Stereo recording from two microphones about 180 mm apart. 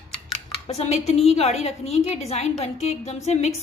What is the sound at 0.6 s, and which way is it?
A woman's voice, 35° left (ahead or behind).